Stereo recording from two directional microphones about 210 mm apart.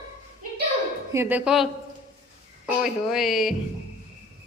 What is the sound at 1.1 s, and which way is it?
Speech, 10° right (ahead or behind).